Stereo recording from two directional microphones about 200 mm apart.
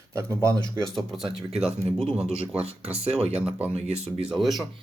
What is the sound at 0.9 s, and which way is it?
Speech, centre (ahead or behind).